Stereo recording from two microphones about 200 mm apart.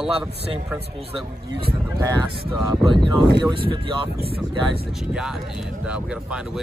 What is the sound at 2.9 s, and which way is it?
Speech, 25° right (ahead or behind).